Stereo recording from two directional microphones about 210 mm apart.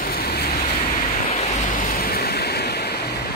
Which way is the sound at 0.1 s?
50° left (ahead or behind).